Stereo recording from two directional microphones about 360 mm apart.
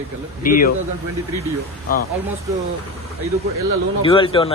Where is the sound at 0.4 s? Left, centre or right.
Left.